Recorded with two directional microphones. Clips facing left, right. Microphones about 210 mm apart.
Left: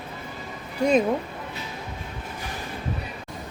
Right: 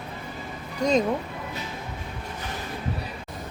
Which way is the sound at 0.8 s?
10° left (ahead or behind).